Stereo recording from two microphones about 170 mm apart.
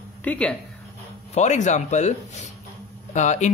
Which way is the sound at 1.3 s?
45° left (ahead or behind).